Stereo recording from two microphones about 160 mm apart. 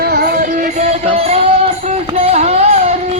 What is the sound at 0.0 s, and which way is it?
Music, 75° right (ahead or behind).